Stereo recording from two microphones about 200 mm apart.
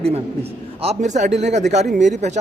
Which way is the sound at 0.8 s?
35° right (ahead or behind).